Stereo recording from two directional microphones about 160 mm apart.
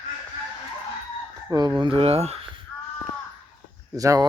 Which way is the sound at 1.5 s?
25° right (ahead or behind).